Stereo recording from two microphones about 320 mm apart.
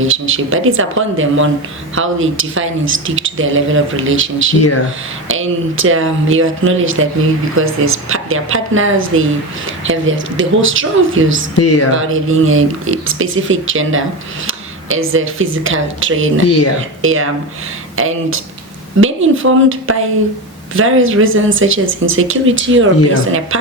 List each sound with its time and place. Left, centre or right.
0.0 s speech: right
11.5 s speech: left
11.9 s speech: right